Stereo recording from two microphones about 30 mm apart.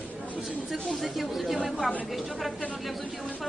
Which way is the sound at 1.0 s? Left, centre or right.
Centre.